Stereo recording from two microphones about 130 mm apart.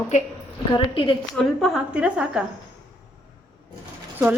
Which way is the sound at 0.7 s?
40° left (ahead or behind).